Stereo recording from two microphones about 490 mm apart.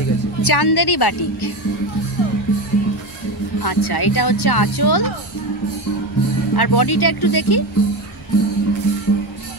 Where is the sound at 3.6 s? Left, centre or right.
Left.